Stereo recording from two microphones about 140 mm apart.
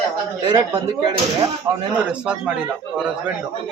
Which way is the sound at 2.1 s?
5° right (ahead or behind).